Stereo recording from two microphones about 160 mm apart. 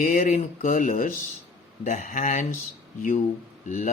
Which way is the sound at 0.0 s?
50° left (ahead or behind).